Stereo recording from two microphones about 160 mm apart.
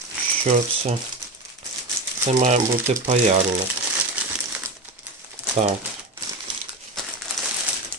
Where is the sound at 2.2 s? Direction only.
45° right (ahead or behind).